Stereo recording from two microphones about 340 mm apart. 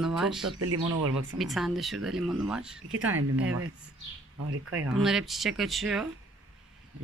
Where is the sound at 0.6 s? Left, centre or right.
Right.